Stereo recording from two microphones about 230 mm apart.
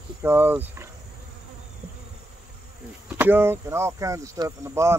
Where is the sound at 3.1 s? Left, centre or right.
Centre.